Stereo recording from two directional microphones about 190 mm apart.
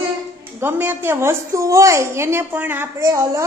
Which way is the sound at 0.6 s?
10° right (ahead or behind).